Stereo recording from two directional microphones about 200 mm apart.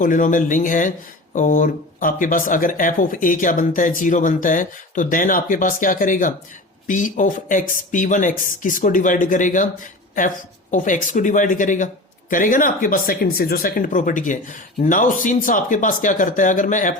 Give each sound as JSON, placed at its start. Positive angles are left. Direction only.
{"t": 0.0, "sound": "speech", "side_deg": 40}